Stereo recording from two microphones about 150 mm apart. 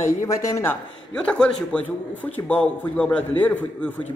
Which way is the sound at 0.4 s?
20° left (ahead or behind).